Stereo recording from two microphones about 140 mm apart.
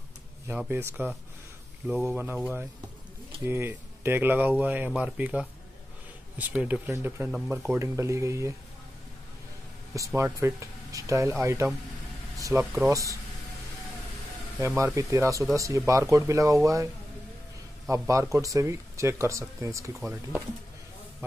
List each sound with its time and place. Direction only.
0.5 s speech: 15° right (ahead or behind)
1.9 s speech: centre (ahead or behind)
3.4 s speech: 15° right (ahead or behind)
7.2 s speech: centre (ahead or behind)
7.5 s speech: 20° right (ahead or behind)
9.9 s speech: 20° right (ahead or behind)
15.0 s speech: 20° right (ahead or behind)
20.0 s speech: centre (ahead or behind)